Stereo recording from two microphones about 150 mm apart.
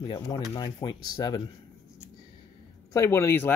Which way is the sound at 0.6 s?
25° left (ahead or behind).